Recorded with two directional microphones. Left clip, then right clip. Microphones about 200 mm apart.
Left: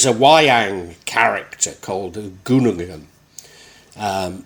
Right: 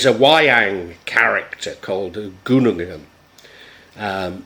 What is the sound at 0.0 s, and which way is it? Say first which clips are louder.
Speech: left 1 dB; 30° left (ahead or behind).